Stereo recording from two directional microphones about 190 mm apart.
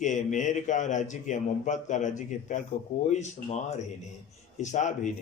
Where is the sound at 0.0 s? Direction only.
40° left (ahead or behind).